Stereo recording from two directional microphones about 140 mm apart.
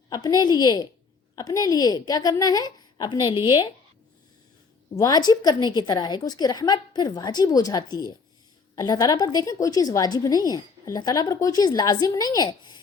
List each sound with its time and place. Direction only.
0.1 s a woman's voice: 30° left (ahead or behind)
4.9 s a woman's voice: 25° left (ahead or behind)